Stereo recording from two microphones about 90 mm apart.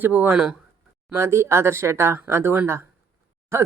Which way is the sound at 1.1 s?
30° right (ahead or behind).